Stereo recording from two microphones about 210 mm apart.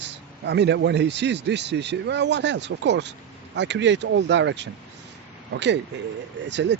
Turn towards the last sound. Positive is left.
turn(degrees=-55)  # may be behind; listen again after turning